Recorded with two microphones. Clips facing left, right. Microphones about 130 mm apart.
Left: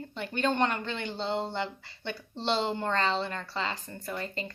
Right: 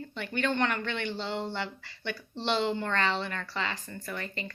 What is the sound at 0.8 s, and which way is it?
A woman's voice, 30° left (ahead or behind).